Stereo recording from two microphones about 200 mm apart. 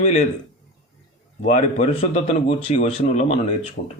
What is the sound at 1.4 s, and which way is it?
Speech, 35° left (ahead or behind).